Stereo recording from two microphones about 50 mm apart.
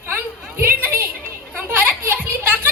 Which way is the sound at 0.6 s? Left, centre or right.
Right.